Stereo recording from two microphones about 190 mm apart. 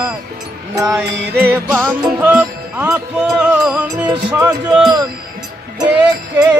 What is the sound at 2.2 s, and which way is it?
Music, 10° right (ahead or behind).